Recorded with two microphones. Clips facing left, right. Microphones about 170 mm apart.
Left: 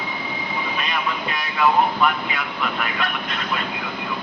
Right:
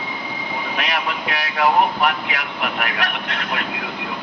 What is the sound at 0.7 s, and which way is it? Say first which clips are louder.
Speech: right 3 dB; 80° right.